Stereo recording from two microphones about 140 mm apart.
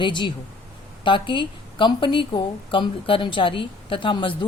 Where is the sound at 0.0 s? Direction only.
35° left (ahead or behind).